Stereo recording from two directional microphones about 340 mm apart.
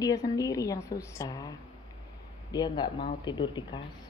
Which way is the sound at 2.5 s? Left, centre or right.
Centre.